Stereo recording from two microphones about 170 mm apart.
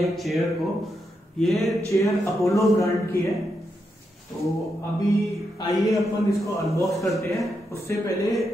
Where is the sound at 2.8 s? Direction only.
15° left (ahead or behind).